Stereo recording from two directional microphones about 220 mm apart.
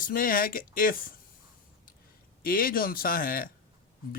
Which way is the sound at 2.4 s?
40° left (ahead or behind).